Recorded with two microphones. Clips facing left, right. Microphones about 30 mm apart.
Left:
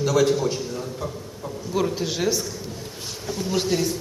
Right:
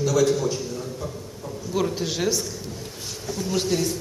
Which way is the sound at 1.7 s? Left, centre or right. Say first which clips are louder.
Left 1 dB; centre.